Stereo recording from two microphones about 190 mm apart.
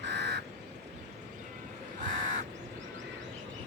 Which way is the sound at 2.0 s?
40° right (ahead or behind).